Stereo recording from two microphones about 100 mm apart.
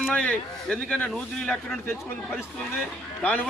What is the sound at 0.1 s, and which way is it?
A man's voice, 15° left (ahead or behind).